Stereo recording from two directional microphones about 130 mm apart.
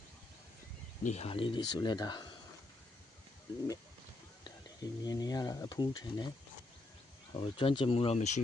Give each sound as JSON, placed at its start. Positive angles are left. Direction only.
{"t": 1.0, "sound": "speech", "side_deg": 55}
{"t": 4.4, "sound": "speech", "side_deg": 30}
{"t": 7.3, "sound": "speech", "side_deg": 45}